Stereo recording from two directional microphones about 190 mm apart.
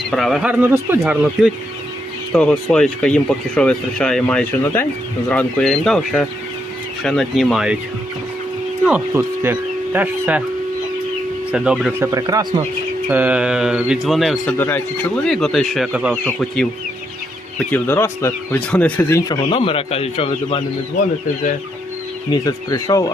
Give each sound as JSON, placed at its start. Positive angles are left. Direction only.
{"t": 0.1, "sound": "speech", "side_deg": 0}
{"t": 8.8, "sound": "speech", "side_deg": -10}
{"t": 11.5, "sound": "speech", "side_deg": -5}
{"t": 12.1, "sound": "speech", "side_deg": -20}
{"t": 13.1, "sound": "speech", "side_deg": -10}
{"t": 19.5, "sound": "speech", "side_deg": 30}
{"t": 22.3, "sound": "speech", "side_deg": 20}